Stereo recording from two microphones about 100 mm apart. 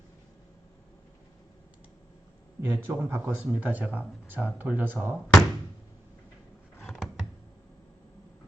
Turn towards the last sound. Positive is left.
turn(degrees=5)  # may be behind; listen again after turning